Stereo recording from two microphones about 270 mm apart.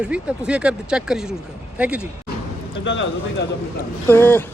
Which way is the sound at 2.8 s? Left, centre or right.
Left.